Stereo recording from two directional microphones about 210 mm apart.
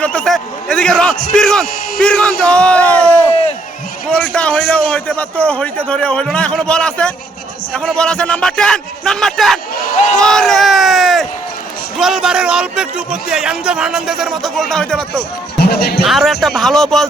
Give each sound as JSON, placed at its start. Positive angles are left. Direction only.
{"t": 0.0, "sound": "speech", "side_deg": 5}
{"t": 4.2, "sound": "speech", "side_deg": 5}
{"t": 10.2, "sound": "a sound", "side_deg": 5}
{"t": 11.9, "sound": "speech", "side_deg": 0}
{"t": 15.5, "sound": "speech", "side_deg": 50}
{"t": 16.0, "sound": "speech", "side_deg": 0}